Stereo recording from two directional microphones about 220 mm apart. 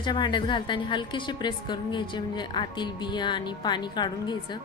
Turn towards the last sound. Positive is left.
turn(degrees=20)  # may be behind; listen again after turning